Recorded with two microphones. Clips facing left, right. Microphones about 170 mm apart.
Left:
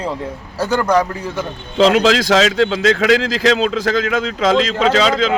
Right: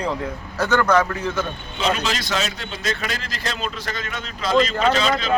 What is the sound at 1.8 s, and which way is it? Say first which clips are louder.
Speech: left 11 dB; 90° left.